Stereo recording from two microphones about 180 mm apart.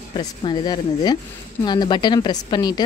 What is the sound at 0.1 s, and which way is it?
Speech, 25° left (ahead or behind).